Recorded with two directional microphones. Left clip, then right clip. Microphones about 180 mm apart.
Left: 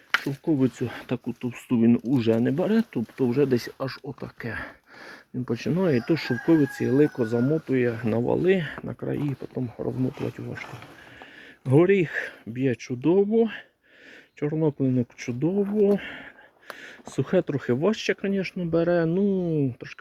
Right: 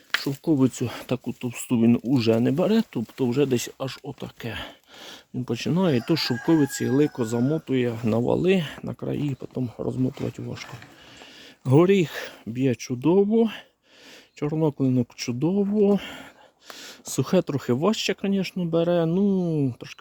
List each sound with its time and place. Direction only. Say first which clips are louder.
0.3 s speech: right 2 dB; 50° right (ahead or behind); by 8.0 s 30° right (ahead or behind)
8.0 s speech: right 3 dB; 45° right (ahead or behind)
11.6 s speech: right 1 dB; 40° right (ahead or behind)